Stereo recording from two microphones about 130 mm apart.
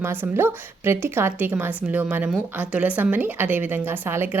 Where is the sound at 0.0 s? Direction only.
15° right (ahead or behind).